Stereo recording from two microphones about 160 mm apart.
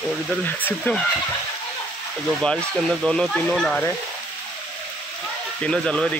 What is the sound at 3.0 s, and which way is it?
Speech, 5° left (ahead or behind).